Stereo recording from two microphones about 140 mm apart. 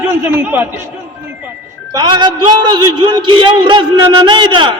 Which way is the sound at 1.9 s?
30° right (ahead or behind).